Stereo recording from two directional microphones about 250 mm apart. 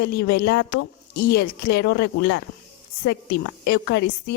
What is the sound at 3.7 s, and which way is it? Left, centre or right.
Speech, left.